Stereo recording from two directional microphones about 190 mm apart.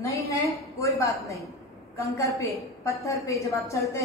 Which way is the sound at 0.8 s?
15° left (ahead or behind).